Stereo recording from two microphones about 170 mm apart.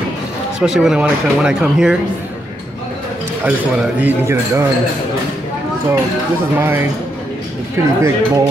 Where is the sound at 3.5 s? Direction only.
10° right (ahead or behind).